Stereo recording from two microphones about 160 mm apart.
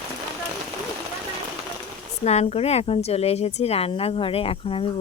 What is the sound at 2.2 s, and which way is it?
Speech, 40° left (ahead or behind).